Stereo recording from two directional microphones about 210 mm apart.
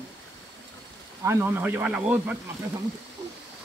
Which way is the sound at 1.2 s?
10° right (ahead or behind).